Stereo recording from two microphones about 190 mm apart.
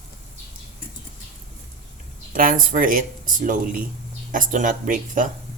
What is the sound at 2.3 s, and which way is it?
Speech, 45° right (ahead or behind).